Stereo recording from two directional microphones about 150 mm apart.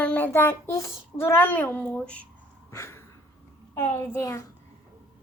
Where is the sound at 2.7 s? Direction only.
20° left (ahead or behind).